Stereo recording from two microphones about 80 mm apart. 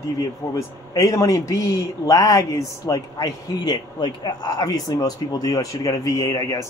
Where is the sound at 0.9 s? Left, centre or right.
Left.